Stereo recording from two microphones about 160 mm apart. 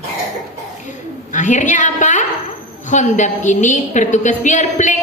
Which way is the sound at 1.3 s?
50° left (ahead or behind).